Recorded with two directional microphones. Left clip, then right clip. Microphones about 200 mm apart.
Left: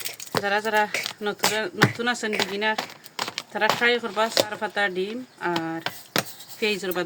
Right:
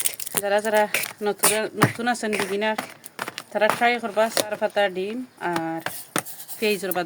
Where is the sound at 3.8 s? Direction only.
40° right (ahead or behind).